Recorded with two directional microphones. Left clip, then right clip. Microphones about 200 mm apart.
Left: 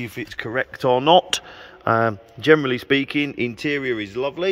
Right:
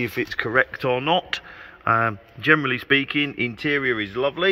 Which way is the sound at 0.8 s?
35° left (ahead or behind).